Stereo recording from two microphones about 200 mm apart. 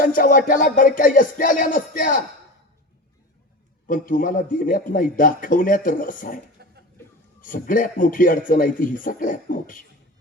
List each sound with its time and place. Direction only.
0.0 s music: 45° left (ahead or behind)
3.8 s a man's voice: 40° left (ahead or behind)
7.4 s a man's voice: 45° left (ahead or behind)